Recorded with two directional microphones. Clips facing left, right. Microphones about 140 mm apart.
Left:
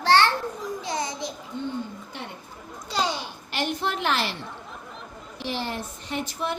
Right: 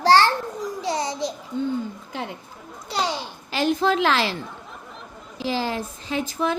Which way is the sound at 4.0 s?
90° right.